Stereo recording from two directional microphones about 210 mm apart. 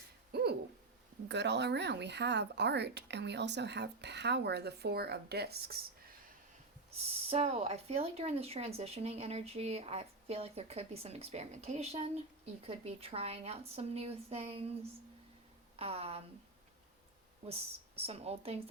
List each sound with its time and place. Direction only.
0.3 s owl: 50° right (ahead or behind)
1.3 s speech: 55° right (ahead or behind)
6.9 s speech: 30° right (ahead or behind)
15.7 s speech: 30° right (ahead or behind)
17.4 s speech: 30° right (ahead or behind)